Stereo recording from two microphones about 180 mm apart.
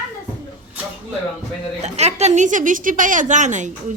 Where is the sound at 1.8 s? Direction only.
35° right (ahead or behind).